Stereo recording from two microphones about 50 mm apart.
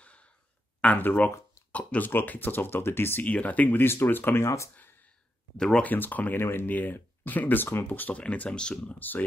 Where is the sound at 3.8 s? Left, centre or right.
Left.